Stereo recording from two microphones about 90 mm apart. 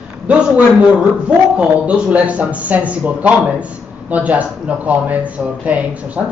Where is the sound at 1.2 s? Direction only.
15° right (ahead or behind).